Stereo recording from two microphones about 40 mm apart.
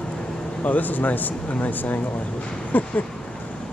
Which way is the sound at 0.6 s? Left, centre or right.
Left.